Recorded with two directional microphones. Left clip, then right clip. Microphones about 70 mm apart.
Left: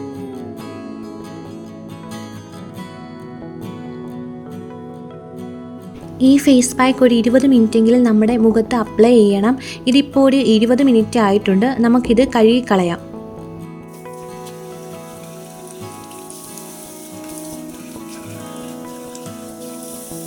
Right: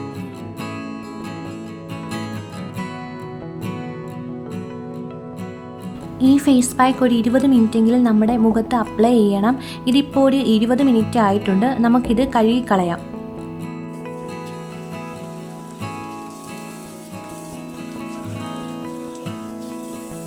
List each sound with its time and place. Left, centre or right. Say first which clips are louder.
6.1 s a woman's voice: left 3 dB; centre